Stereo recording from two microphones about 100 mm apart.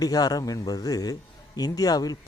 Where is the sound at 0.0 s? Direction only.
40° left (ahead or behind).